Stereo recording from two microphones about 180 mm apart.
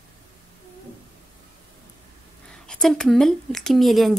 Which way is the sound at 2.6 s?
5° left (ahead or behind).